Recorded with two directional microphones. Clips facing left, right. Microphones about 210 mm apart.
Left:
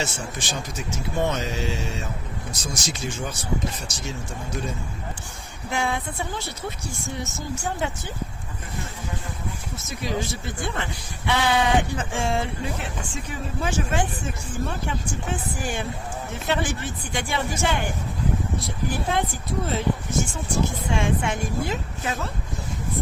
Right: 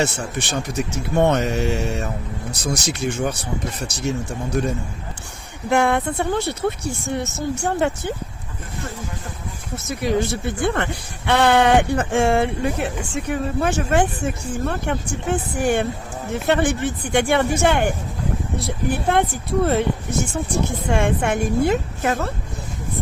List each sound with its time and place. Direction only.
0.0 s speech: 65° right (ahead or behind)
5.7 s speech: 60° right (ahead or behind)
9.7 s speech: 65° right (ahead or behind)
20.9 s speech: 55° right (ahead or behind)